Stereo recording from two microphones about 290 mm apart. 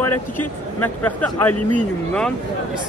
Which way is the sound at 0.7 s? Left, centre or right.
Centre.